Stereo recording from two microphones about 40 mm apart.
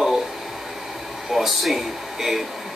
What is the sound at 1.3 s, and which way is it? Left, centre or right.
Speech, centre.